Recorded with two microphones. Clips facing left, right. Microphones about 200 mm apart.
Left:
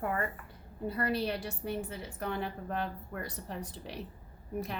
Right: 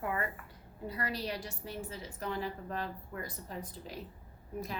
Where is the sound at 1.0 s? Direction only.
55° left (ahead or behind).